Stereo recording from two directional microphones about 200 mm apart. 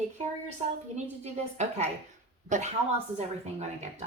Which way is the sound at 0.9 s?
35° right (ahead or behind).